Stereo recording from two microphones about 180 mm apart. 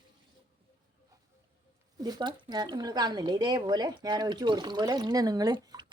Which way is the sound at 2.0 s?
20° right (ahead or behind).